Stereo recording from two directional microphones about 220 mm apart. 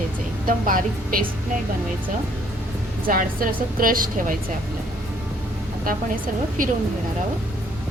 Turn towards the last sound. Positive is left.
turn(degrees=-40)  # may be behind; listen again after turning